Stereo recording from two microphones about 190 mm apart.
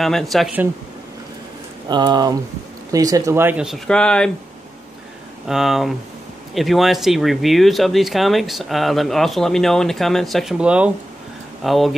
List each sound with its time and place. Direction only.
0.0 s speech: centre (ahead or behind)
1.9 s speech: 20° right (ahead or behind); by 4.3 s 5° left (ahead or behind)
5.5 s speech: centre (ahead or behind)